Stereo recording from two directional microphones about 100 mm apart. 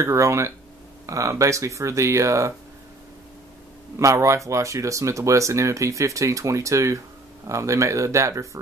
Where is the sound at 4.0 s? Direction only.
30° right (ahead or behind).